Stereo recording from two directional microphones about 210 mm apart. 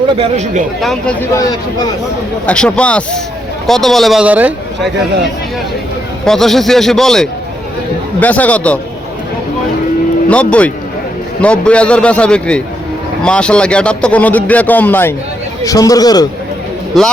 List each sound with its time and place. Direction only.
0.2 s speech: 30° right (ahead or behind)
0.8 s a man's voice: 5° left (ahead or behind)
1.4 s speech: 20° left (ahead or behind)
2.5 s a man's voice: 5° left (ahead or behind)
6.2 s a man's voice: centre (ahead or behind)
10.2 s a man's voice: 5° left (ahead or behind)
16.9 s a man's voice: centre (ahead or behind)